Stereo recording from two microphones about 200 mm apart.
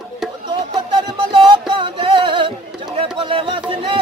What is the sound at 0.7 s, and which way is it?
Music, 25° right (ahead or behind).